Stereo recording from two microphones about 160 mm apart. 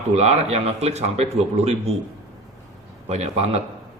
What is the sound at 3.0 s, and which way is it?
Speech, 40° right (ahead or behind).